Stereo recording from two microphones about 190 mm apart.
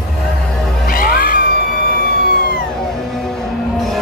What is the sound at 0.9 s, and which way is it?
Music, 50° left (ahead or behind).